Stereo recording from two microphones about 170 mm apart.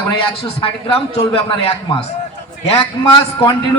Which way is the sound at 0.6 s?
35° left (ahead or behind).